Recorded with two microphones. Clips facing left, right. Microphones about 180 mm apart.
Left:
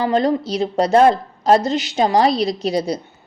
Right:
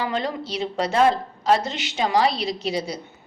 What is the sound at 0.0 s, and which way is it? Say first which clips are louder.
A woman's voice: left 9 dB; 40° left (ahead or behind).